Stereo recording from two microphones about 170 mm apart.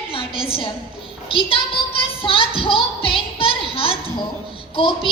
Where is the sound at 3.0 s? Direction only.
35° left (ahead or behind).